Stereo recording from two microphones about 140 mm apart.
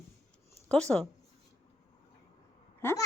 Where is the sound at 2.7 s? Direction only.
20° left (ahead or behind).